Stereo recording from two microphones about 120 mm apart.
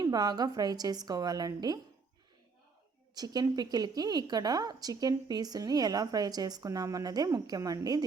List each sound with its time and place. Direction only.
0.0 s a woman's voice: 35° right (ahead or behind)
3.2 s a woman's voice: 35° right (ahead or behind)